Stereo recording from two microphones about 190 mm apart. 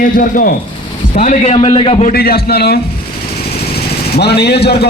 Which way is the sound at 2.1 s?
55° left (ahead or behind).